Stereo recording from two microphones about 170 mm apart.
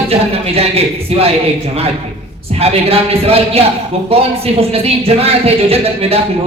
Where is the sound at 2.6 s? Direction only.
35° right (ahead or behind).